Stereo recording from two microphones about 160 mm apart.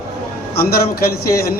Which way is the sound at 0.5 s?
75° left (ahead or behind).